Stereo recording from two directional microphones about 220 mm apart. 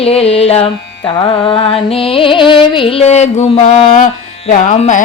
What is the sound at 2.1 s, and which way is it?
Music, 25° left (ahead or behind).